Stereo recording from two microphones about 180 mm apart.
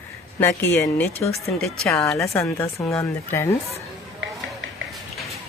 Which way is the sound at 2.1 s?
15° left (ahead or behind).